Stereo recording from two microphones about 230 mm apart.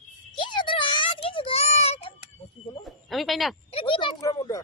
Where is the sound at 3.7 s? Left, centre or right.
Left.